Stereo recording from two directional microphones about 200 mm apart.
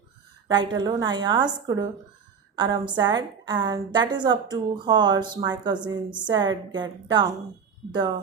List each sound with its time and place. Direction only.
0.4 s a woman's voice: 20° right (ahead or behind)